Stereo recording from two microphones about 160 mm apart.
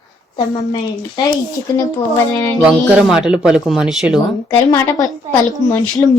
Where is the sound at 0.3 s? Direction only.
25° left (ahead or behind).